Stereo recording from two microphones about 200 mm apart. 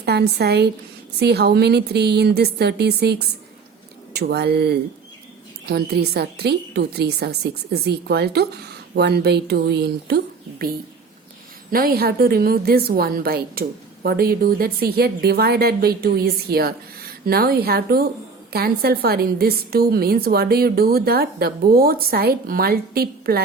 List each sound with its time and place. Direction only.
0.0 s a woman's voice: 55° right (ahead or behind)
11.7 s a woman's voice: 50° right (ahead or behind)